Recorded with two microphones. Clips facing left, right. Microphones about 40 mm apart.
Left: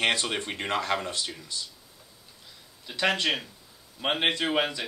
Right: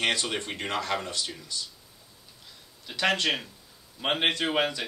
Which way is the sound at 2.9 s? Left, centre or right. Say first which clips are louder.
Even; centre.